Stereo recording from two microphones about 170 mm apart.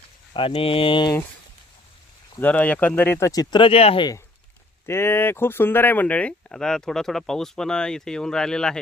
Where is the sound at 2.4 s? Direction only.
10° left (ahead or behind); by 4.2 s 30° left (ahead or behind).